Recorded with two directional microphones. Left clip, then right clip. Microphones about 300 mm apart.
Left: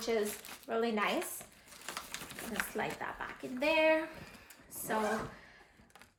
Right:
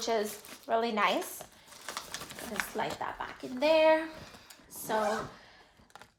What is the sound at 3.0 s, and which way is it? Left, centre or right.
A woman's voice, centre.